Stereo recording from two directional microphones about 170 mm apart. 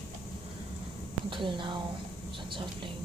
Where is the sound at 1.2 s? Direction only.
30° right (ahead or behind).